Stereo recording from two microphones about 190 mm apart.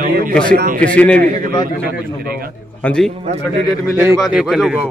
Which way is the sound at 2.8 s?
5° left (ahead or behind).